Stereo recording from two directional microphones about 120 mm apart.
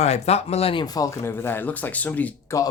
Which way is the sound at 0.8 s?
30° left (ahead or behind).